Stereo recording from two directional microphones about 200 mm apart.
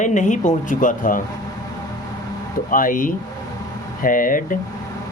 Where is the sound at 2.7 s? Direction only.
45° left (ahead or behind).